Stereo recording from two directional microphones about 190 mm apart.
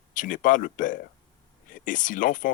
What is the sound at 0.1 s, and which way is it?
Speech, 45° left (ahead or behind).